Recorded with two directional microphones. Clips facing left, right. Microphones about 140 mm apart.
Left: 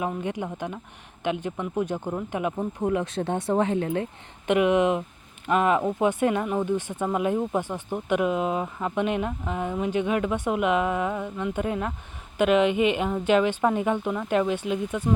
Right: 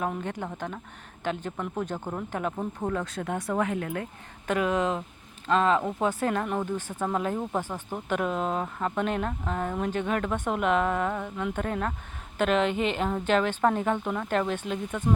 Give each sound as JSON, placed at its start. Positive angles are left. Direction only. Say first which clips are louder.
{"t": 0.0, "sound": "speech", "louder": "left 2 dB", "side_deg": 10}